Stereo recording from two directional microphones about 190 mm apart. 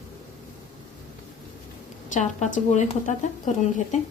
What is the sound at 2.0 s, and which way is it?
A woman's voice, 40° left (ahead or behind).